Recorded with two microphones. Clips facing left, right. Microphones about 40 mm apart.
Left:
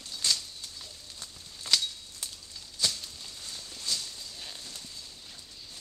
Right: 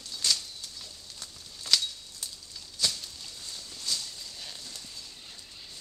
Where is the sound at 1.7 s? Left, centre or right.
Centre.